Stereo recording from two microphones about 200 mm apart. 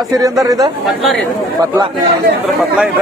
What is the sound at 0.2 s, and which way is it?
Speech, 15° right (ahead or behind).